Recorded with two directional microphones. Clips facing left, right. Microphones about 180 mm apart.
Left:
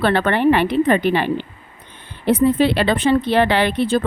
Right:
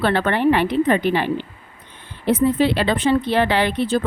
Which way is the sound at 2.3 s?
65° left (ahead or behind).